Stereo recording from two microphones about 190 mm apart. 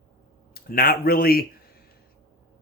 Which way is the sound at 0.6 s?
50° left (ahead or behind).